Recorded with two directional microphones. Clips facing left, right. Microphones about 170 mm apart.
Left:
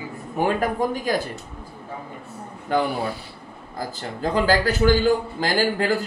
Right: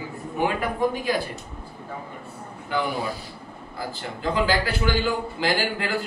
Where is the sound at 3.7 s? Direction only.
40° left (ahead or behind).